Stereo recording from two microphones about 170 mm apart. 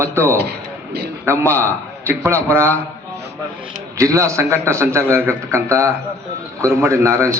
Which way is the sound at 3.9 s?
15° right (ahead or behind).